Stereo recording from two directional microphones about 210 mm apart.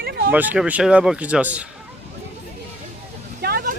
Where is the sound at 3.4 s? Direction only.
45° right (ahead or behind).